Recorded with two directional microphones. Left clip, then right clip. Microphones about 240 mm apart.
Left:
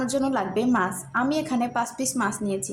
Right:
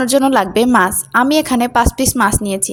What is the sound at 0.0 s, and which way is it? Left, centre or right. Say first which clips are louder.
A woman's voice: right 12 dB; right.